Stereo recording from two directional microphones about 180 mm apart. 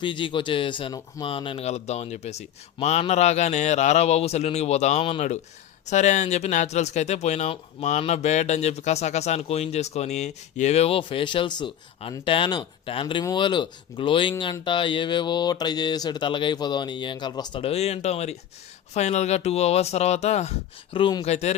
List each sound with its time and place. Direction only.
0.0 s speech: 25° left (ahead or behind)
21.2 s speech: 35° left (ahead or behind)